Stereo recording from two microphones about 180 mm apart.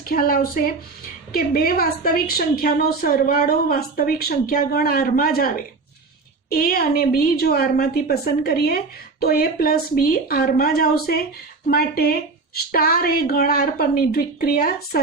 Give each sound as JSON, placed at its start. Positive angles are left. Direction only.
{"t": 0.1, "sound": "a woman's voice", "side_deg": 55}